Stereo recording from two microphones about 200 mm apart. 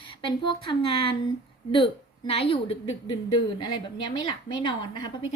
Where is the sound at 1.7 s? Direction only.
25° left (ahead or behind).